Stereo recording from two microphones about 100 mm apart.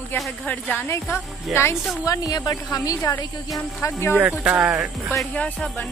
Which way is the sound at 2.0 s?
35° left (ahead or behind).